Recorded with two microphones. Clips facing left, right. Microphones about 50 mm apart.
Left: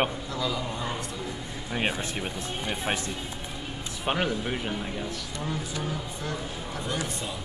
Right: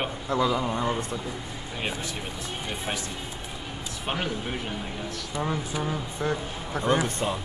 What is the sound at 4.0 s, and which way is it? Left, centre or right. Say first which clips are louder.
Speech: left 3 dB; centre.